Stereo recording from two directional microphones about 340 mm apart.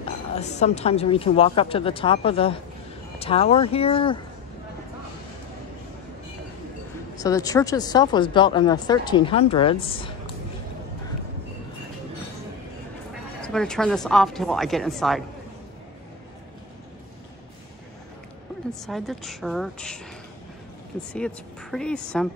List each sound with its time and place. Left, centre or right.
0.4 s speech: centre
7.2 s speech: centre
13.4 s speech: centre
18.7 s speech: centre
21.1 s speech: centre